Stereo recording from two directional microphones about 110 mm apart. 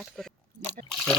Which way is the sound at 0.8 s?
5° left (ahead or behind).